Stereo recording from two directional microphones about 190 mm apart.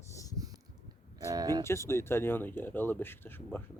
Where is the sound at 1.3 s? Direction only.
20° right (ahead or behind).